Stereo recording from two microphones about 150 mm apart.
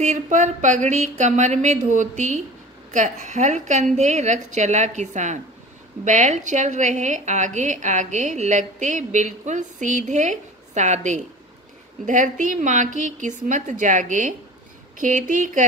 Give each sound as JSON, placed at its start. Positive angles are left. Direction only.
{"t": 0.0, "sound": "a woman's voice", "side_deg": -55}